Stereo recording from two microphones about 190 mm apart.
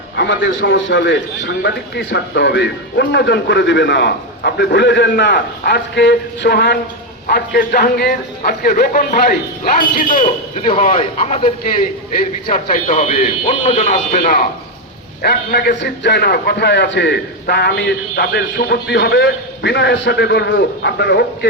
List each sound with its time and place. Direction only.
0.2 s a man's voice: 75° left (ahead or behind)